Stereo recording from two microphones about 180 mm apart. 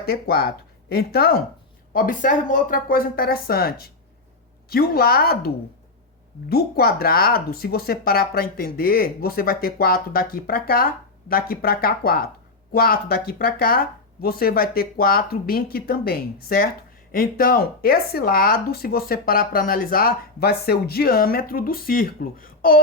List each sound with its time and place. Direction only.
0.0 s speech: 60° left (ahead or behind)
6.5 s speech: 60° left (ahead or behind)